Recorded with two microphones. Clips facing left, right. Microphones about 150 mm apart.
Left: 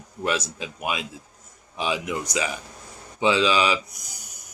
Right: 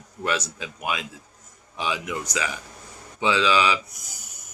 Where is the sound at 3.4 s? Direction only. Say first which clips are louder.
Even; 15° left (ahead or behind).